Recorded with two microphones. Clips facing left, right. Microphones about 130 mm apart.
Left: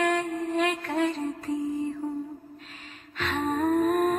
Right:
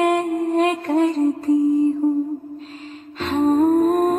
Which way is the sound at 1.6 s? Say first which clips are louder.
Right 13 dB; 35° right (ahead or behind).